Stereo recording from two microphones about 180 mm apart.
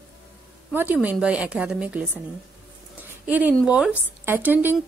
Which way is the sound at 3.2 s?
10° right (ahead or behind).